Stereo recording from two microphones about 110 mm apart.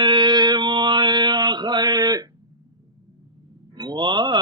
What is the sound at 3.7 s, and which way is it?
Speech, 45° right (ahead or behind).